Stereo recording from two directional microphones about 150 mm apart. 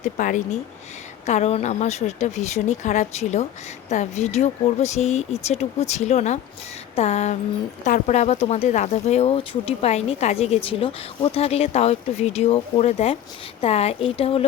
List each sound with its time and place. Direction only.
0.0 s a woman's voice: 60° left (ahead or behind); by 14.4 s 40° left (ahead or behind)